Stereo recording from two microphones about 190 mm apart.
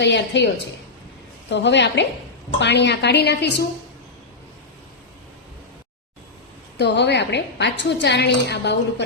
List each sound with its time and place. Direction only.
0.0 s a woman's voice: 65° left (ahead or behind)
6.7 s a woman's voice: 65° left (ahead or behind)